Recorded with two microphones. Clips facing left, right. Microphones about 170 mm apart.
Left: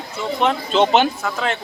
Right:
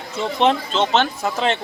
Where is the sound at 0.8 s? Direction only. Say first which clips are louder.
Left 4 dB; 10° left (ahead or behind).